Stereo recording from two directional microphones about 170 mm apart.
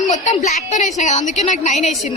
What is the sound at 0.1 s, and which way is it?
A woman's voice, 45° left (ahead or behind).